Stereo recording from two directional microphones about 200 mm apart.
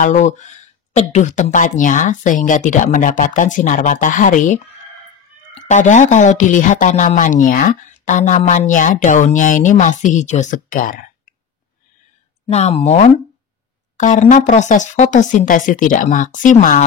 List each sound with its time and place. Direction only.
0.0 s speech: 35° left (ahead or behind)
12.4 s speech: 30° left (ahead or behind)